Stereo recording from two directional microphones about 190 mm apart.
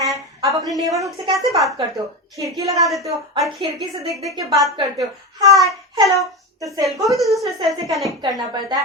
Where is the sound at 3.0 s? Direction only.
15° right (ahead or behind).